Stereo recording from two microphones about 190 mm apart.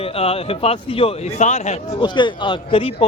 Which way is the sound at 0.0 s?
30° left (ahead or behind).